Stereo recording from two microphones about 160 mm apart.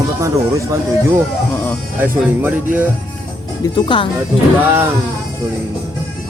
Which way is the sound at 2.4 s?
10° right (ahead or behind).